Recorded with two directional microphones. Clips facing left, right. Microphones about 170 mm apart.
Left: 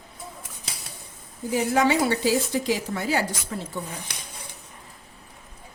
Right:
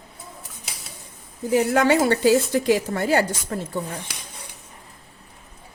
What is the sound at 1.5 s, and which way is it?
A woman's voice, 55° right (ahead or behind).